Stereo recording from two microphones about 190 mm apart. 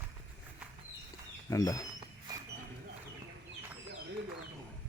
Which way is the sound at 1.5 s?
15° left (ahead or behind).